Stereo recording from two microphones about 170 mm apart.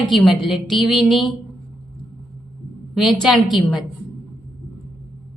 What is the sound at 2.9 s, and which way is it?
Speech, centre (ahead or behind).